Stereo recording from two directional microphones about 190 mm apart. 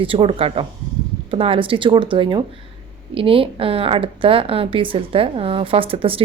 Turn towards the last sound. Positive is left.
turn(degrees=-30)  # may be behind; listen again after turning